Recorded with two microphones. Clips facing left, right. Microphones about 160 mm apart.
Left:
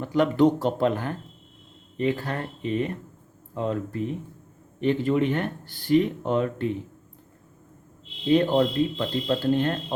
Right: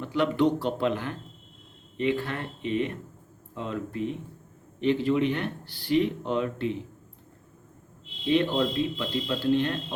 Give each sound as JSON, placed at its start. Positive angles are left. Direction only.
{"t": 0.0, "sound": "speech", "side_deg": 45}
{"t": 8.3, "sound": "speech", "side_deg": 45}